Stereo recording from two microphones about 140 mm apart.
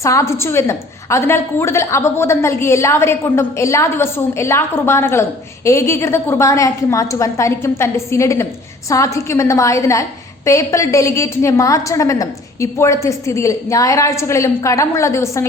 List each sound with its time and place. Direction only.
0.0 s a woman's voice: 20° left (ahead or behind)